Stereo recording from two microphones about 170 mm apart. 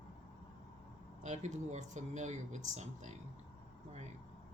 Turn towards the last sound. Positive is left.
turn(degrees=-45)  # may be behind; listen again after turning